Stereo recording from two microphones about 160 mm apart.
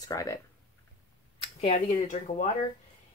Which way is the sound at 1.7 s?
50° left (ahead or behind).